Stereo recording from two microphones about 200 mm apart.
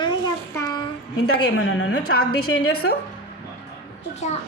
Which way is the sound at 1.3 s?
90° left.